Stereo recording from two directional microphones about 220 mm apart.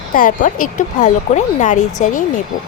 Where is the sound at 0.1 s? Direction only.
40° left (ahead or behind).